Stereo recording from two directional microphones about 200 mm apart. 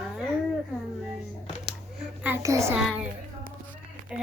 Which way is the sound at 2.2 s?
10° right (ahead or behind).